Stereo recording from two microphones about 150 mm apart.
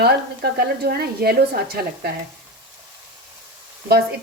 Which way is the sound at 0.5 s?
90° right.